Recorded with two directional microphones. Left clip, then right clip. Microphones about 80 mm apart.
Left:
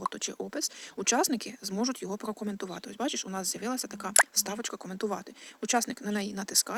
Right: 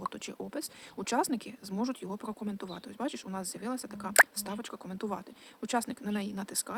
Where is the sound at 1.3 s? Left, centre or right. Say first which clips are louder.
Left 3 dB; left.